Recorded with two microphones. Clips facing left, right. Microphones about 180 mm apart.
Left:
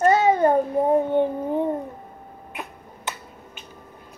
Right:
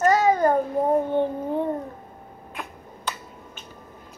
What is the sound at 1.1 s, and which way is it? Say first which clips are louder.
Child singing: left 2 dB; 15° left (ahead or behind).